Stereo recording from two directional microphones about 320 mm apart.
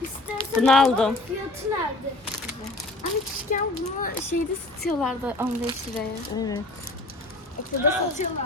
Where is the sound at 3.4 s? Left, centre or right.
Left.